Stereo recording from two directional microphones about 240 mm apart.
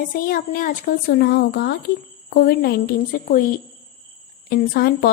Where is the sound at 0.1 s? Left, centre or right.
Left.